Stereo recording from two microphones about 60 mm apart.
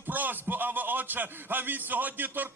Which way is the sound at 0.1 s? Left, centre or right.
Right.